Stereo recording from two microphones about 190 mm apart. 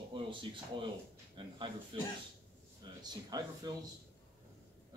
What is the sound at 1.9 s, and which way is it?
Speech, 25° right (ahead or behind).